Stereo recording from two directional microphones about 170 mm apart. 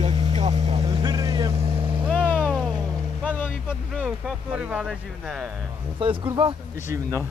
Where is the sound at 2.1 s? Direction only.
10° left (ahead or behind).